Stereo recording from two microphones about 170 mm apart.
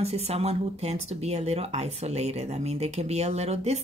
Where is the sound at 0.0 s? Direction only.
40° right (ahead or behind).